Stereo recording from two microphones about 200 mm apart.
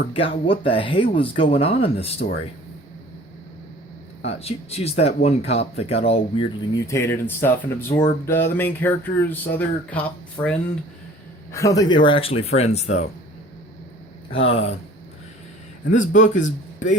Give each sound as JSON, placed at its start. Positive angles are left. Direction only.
{"t": 0.1, "sound": "speech", "side_deg": 25}
{"t": 4.3, "sound": "speech", "side_deg": 30}
{"t": 6.7, "sound": "a sound", "side_deg": 15}
{"t": 10.4, "sound": "speech", "side_deg": 20}
{"t": 14.4, "sound": "speech", "side_deg": 30}
{"t": 15.9, "sound": "speech", "side_deg": 40}